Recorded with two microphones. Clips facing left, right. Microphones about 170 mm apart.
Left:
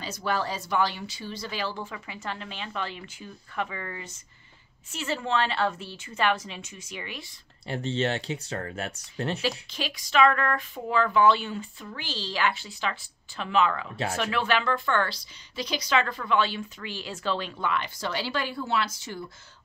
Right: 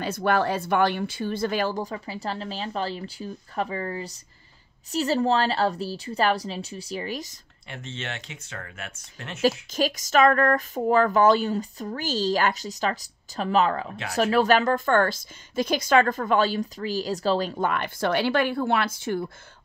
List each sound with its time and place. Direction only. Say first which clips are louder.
0.0 s speech: right 6 dB; 55° right (ahead or behind); by 7.3 s 40° right (ahead or behind)
7.6 s speech: left 9 dB; 35° left (ahead or behind)
9.7 s speech: right 9 dB; 45° right (ahead or behind)